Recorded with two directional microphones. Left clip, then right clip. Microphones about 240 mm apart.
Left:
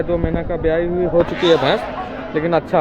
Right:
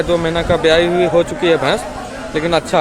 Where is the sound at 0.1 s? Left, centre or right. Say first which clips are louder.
Right 6 dB; centre.